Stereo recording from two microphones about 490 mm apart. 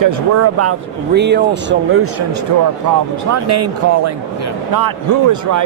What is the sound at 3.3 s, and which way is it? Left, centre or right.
Speech, right.